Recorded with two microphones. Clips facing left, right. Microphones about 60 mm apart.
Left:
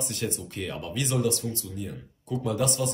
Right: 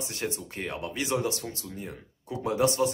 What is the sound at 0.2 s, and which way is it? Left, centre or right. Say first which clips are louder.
Speech: even; right.